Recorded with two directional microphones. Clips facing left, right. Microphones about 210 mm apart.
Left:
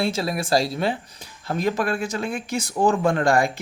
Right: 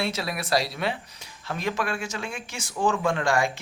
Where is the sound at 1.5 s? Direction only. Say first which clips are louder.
Left 5 dB; 35° left (ahead or behind).